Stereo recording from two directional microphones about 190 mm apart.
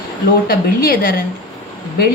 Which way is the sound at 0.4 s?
50° left (ahead or behind).